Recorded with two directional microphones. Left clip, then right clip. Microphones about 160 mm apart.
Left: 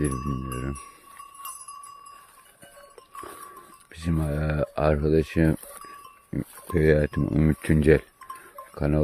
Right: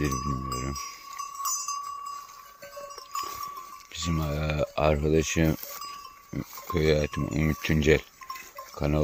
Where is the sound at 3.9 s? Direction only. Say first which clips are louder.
Left 1 dB; 55° left (ahead or behind).